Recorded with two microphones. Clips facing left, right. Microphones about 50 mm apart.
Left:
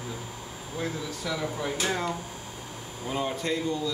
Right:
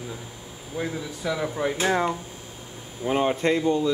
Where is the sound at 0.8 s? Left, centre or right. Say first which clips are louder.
Right 3 dB; centre.